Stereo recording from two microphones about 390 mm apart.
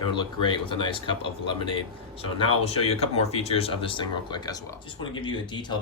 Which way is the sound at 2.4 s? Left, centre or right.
Centre.